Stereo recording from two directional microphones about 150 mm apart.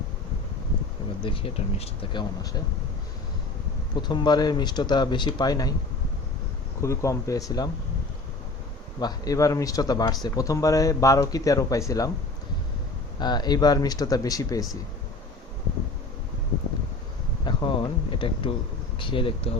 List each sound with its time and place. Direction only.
1.2 s speech: 35° left (ahead or behind)
4.1 s speech: 30° left (ahead or behind)
6.8 s speech: 20° left (ahead or behind)
9.0 s speech: 25° left (ahead or behind)
13.1 s speech: 30° left (ahead or behind)
17.4 s speech: 30° left (ahead or behind)